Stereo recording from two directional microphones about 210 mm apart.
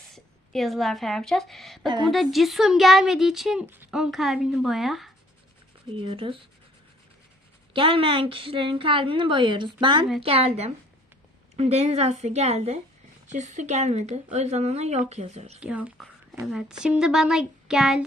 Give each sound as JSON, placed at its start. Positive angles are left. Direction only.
{"t": 0.1, "sound": "a woman's voice", "side_deg": 0}
{"t": 5.9, "sound": "a woman's voice", "side_deg": -25}
{"t": 7.7, "sound": "a woman's voice", "side_deg": -25}
{"t": 15.6, "sound": "a woman's voice", "side_deg": -5}